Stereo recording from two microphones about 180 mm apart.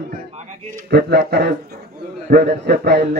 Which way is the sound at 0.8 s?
65° right (ahead or behind).